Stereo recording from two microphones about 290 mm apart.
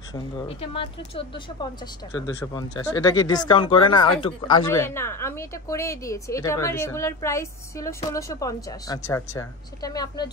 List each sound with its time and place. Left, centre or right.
0.1 s speech: centre